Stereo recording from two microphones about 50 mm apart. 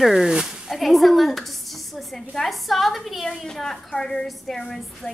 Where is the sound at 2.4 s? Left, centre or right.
Centre.